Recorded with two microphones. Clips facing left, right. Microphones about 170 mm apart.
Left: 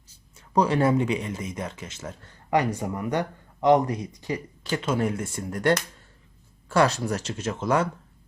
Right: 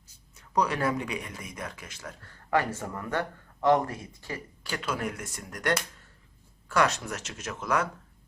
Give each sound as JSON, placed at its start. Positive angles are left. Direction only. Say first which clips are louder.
{"t": 0.3, "sound": "speech", "louder": "left 6 dB", "side_deg": 30}